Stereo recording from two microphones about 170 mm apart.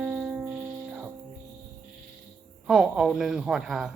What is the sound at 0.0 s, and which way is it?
Music, 10° right (ahead or behind).